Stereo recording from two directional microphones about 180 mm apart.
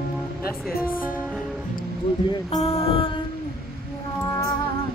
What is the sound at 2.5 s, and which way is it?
Music, 35° left (ahead or behind).